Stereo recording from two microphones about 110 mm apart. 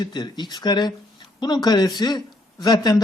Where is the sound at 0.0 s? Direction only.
40° left (ahead or behind).